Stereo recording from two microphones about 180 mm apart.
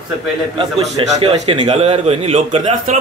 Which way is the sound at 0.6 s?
35° right (ahead or behind).